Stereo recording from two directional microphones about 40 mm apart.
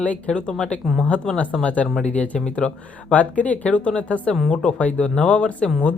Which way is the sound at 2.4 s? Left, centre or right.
Left.